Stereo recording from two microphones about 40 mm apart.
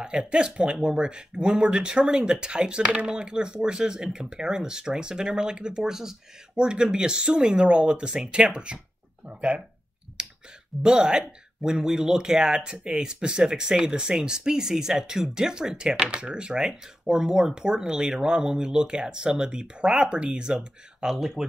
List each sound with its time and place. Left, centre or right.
0.0 s speech: right
6.5 s speech: right
10.2 s clicking: right
10.8 s speech: centre